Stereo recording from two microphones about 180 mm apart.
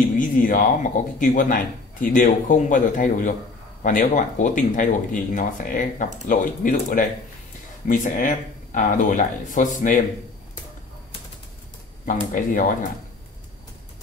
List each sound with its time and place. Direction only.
0.2 s speech: 50° left (ahead or behind)
12.1 s speech: 45° left (ahead or behind)